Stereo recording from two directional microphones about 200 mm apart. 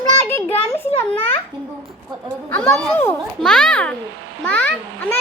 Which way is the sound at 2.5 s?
5° left (ahead or behind).